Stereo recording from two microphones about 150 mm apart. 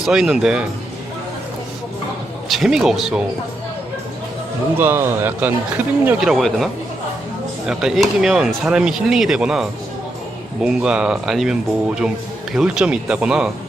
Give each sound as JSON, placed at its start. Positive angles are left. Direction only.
{"t": 0.0, "sound": "speech", "side_deg": -5}
{"t": 2.5, "sound": "speech", "side_deg": 0}
{"t": 4.8, "sound": "speech", "side_deg": -15}
{"t": 7.7, "sound": "speech", "side_deg": -5}
{"t": 12.5, "sound": "speech", "side_deg": -5}